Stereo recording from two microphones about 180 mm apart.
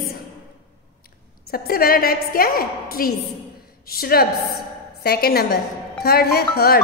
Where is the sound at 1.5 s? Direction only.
55° left (ahead or behind).